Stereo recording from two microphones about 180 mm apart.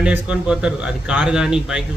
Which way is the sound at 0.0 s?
5° right (ahead or behind).